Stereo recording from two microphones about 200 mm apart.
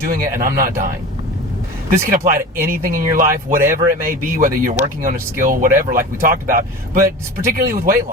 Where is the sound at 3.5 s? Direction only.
15° right (ahead or behind).